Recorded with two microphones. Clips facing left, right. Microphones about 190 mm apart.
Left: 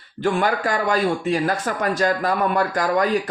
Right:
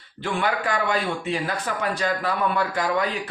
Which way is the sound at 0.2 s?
45° left (ahead or behind).